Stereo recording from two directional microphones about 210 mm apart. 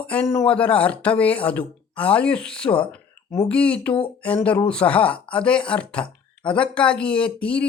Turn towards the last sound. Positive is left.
turn(degrees=5)  # may be behind; listen again after turning